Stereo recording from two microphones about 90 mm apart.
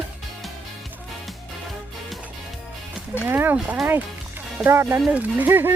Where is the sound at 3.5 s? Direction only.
10° right (ahead or behind).